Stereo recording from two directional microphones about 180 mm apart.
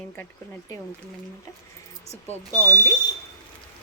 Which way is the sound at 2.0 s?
35° left (ahead or behind).